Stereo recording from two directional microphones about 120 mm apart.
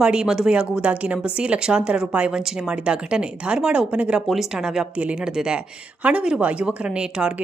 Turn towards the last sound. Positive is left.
turn(degrees=-10)  # may be behind; listen again after turning